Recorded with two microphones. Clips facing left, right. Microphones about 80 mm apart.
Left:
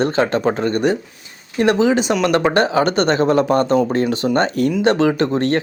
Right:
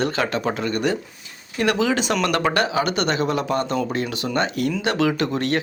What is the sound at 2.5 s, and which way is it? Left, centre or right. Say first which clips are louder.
Speech: left 6 dB; left.